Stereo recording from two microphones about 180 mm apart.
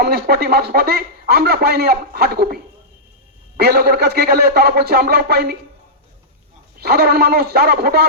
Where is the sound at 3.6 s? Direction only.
60° right (ahead or behind).